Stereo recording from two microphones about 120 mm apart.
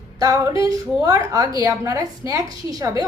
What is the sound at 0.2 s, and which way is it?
A woman's voice, 25° right (ahead or behind).